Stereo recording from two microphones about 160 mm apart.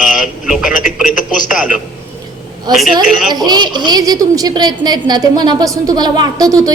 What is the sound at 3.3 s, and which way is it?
A woman's voice, 25° right (ahead or behind).